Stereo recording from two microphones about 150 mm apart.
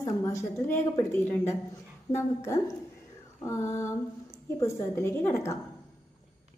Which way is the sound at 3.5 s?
20° left (ahead or behind).